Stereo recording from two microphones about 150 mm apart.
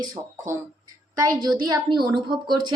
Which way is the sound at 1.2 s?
25° right (ahead or behind).